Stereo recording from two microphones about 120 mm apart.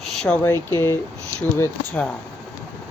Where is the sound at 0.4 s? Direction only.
20° left (ahead or behind).